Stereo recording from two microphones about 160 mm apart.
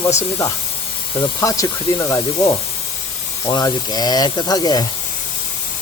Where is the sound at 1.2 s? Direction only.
20° left (ahead or behind).